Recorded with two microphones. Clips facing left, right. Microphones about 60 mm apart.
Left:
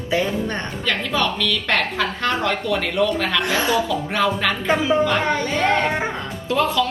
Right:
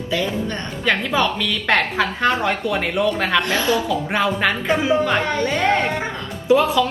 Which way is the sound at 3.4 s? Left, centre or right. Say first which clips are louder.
Right 1 dB; left.